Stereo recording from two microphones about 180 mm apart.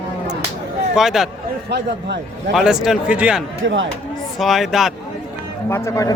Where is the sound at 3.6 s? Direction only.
90° right.